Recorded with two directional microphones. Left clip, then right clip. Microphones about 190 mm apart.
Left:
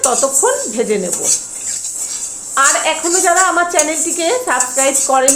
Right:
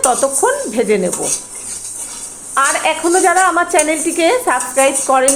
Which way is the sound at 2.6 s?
20° right (ahead or behind).